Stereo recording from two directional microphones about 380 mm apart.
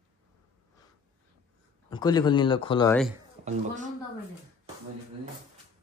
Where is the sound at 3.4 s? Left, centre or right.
Centre.